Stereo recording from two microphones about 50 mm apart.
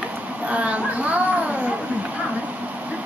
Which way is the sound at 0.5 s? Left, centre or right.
Right.